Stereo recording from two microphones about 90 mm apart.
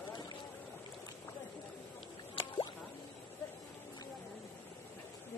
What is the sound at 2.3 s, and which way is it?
Drip, 65° left (ahead or behind).